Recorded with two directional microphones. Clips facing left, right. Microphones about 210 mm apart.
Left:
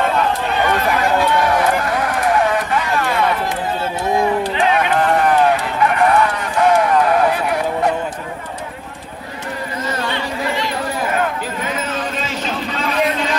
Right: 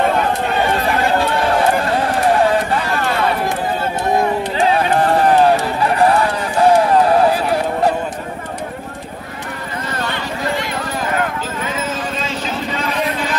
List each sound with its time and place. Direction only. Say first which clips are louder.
0.7 s run: left 2 dB; 30° right (ahead or behind)
4.6 s run: right 4 dB; 35° right (ahead or behind)